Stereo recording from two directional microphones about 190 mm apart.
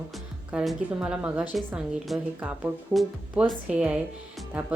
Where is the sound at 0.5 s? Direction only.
5° right (ahead or behind).